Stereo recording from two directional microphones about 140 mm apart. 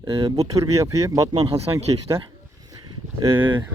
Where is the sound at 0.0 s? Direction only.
25° right (ahead or behind).